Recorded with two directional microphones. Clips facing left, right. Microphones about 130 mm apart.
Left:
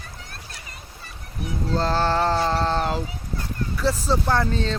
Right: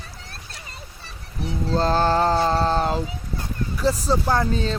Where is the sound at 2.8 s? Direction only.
20° right (ahead or behind).